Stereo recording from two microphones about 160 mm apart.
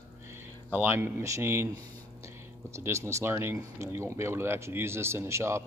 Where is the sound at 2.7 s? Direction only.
15° right (ahead or behind).